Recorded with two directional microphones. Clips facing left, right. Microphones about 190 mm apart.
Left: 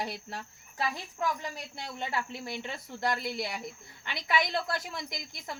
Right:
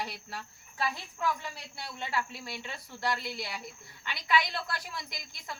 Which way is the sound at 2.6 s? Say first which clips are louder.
Left 1 dB; 45° left (ahead or behind).